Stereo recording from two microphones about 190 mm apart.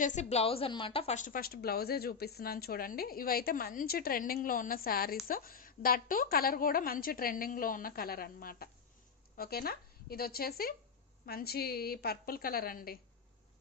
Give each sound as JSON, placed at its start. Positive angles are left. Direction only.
{"t": 0.0, "sound": "a woman's voice", "side_deg": 40}